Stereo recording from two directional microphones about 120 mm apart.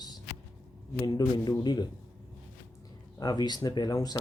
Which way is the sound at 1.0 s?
35° left (ahead or behind).